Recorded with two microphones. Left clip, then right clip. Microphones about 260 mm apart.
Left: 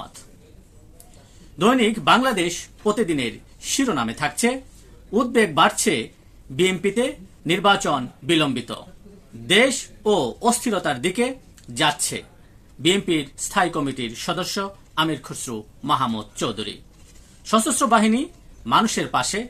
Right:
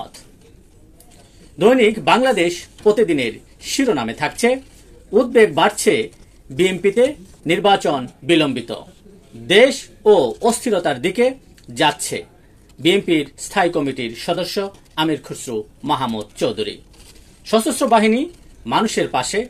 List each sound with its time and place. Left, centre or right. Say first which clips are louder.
1.6 s speech: right 6 dB; centre